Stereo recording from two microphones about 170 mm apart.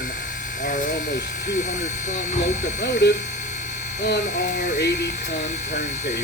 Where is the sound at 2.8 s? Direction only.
80° left.